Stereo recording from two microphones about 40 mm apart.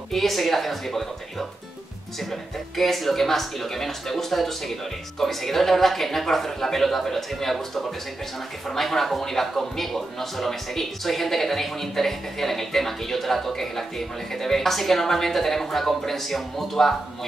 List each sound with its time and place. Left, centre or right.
0.1 s a woman's voice: centre
2.7 s a woman's voice: centre